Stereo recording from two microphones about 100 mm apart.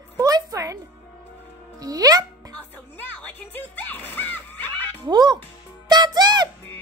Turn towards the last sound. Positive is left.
turn(degrees=-45)  # may be behind; listen again after turning